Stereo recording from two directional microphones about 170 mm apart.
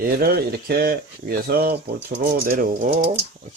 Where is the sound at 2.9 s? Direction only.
35° right (ahead or behind).